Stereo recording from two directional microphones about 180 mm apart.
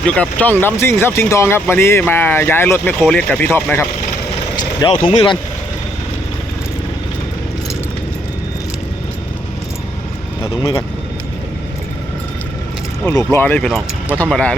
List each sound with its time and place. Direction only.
0.0 s speech: 5° left (ahead or behind)
4.5 s speech: 25° left (ahead or behind)
10.4 s speech: 20° left (ahead or behind)
13.1 s speech: 10° left (ahead or behind)